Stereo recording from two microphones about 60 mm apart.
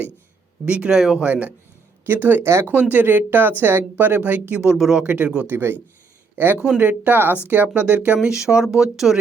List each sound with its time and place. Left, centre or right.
0.6 s speech: centre
1.2 s speech: right
2.4 s speech: right
2.9 s speech: right
4.7 s speech: centre
5.0 s speech: right
8.3 s speech: centre